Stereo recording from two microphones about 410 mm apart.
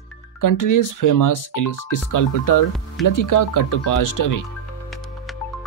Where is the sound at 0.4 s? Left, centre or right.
Left.